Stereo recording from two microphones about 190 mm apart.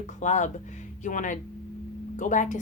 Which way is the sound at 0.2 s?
40° left (ahead or behind).